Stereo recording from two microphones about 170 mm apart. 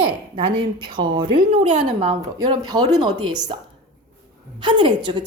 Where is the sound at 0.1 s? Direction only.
30° right (ahead or behind).